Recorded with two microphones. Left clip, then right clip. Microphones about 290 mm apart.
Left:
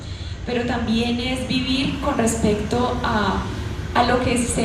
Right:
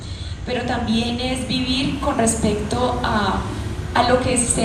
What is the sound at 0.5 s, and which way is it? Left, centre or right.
A woman's voice, right.